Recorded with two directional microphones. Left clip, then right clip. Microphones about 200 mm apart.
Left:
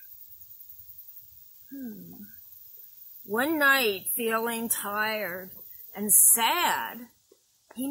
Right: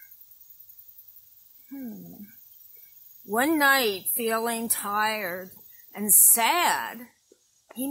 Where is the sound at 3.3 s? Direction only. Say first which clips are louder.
Right 2 dB; 50° right (ahead or behind).